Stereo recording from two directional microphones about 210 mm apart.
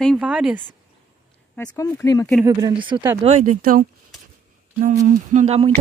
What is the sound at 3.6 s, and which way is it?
Speech, 40° right (ahead or behind).